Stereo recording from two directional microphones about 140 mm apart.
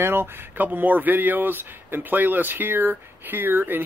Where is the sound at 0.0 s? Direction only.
15° right (ahead or behind).